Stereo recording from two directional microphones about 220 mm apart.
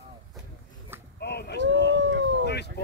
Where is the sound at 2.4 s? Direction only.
50° left (ahead or behind).